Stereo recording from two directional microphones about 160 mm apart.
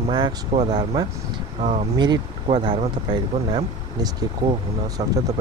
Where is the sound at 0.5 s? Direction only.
35° right (ahead or behind).